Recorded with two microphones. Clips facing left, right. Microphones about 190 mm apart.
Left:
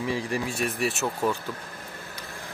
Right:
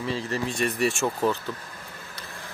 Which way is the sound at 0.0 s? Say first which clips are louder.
Even; 15° left (ahead or behind).